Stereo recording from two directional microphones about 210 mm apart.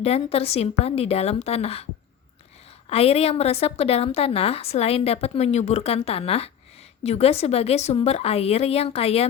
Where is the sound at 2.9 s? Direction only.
30° left (ahead or behind).